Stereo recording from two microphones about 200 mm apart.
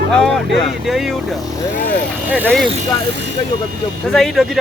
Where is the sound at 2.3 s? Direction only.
5° right (ahead or behind).